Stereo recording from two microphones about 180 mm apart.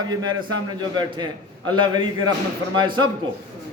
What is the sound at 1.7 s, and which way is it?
Speech, 25° right (ahead or behind).